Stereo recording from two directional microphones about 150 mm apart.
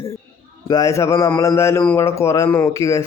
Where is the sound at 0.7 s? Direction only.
25° left (ahead or behind).